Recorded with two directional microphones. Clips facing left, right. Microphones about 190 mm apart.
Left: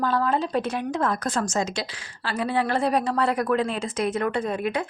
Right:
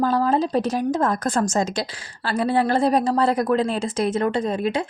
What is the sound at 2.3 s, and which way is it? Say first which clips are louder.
A woman's voice: right 4 dB; 35° right (ahead or behind).